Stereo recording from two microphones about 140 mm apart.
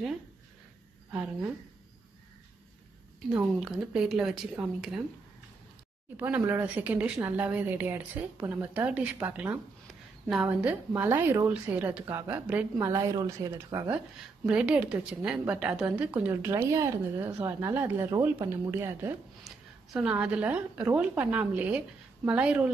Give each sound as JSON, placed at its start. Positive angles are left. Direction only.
{"t": 1.1, "sound": "speech", "side_deg": -5}
{"t": 3.3, "sound": "speech", "side_deg": -5}
{"t": 6.1, "sound": "a woman's voice", "side_deg": -10}
{"t": 13.8, "sound": "a woman's voice", "side_deg": -10}
{"t": 19.4, "sound": "a woman's voice", "side_deg": -5}